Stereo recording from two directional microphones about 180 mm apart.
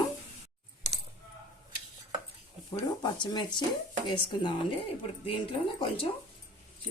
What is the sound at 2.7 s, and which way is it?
Speech, 25° left (ahead or behind).